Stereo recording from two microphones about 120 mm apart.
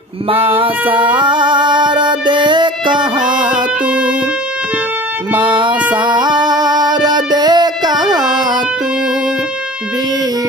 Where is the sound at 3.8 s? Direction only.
10° right (ahead or behind).